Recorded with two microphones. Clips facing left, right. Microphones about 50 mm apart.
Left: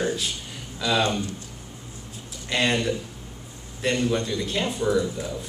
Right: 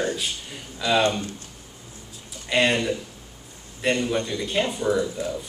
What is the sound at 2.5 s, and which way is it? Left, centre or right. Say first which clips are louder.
Speech: right 2 dB; centre.